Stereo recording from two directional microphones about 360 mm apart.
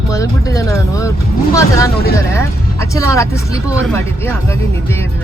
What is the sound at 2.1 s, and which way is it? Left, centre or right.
Speech, centre.